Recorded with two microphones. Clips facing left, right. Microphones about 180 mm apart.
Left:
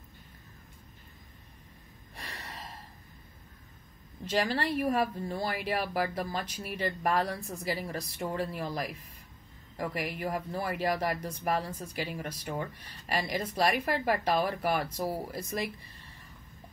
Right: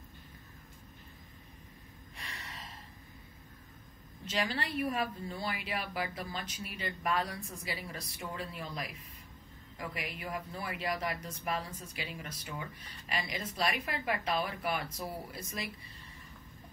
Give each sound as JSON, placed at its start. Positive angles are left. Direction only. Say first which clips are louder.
{"t": 2.1, "sound": "gasp", "louder": "left 4 dB", "side_deg": 45}
{"t": 4.3, "sound": "a woman's voice", "louder": "left 6 dB", "side_deg": 45}
{"t": 9.8, "sound": "a woman's voice", "louder": "left 7 dB", "side_deg": 45}